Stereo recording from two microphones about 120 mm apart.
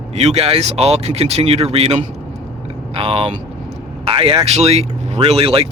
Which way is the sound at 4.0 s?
50° right (ahead or behind).